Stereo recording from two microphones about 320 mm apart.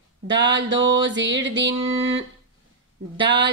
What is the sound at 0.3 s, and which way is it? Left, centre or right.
Music, right.